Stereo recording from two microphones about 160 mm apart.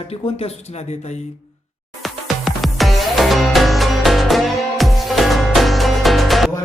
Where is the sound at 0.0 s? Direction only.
35° left (ahead or behind).